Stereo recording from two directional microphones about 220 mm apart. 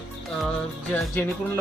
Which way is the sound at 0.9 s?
5° left (ahead or behind).